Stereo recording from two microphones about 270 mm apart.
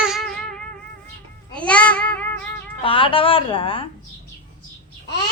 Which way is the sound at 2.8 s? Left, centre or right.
Centre.